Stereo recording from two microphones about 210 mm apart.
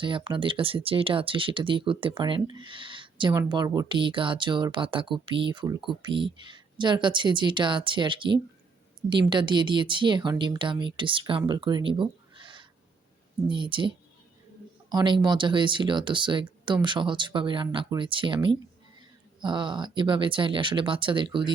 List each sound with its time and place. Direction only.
0.0 s speech: 25° right (ahead or behind)